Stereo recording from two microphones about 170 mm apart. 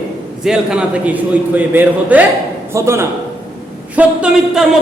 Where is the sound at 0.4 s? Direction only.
5° right (ahead or behind).